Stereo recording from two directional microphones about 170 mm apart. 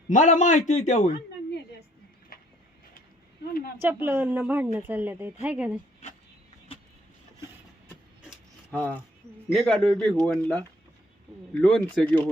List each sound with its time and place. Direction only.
0.1 s a man's voice: 45° left (ahead or behind)
2.3 s a sound: 60° left (ahead or behind)
3.8 s a woman's voice: 10° right (ahead or behind)
8.7 s speech: 10° left (ahead or behind)